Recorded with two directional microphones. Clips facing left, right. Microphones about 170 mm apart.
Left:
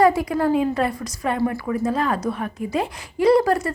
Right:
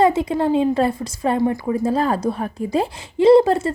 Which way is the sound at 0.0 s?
25° right (ahead or behind).